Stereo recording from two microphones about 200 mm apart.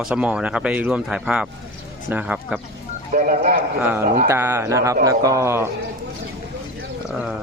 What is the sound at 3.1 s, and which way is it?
Speech, 40° right (ahead or behind).